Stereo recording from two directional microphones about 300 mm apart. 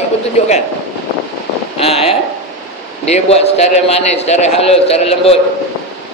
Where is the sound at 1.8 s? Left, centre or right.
Centre.